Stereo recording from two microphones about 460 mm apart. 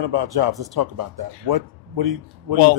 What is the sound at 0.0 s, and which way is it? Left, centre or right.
A man's voice, right.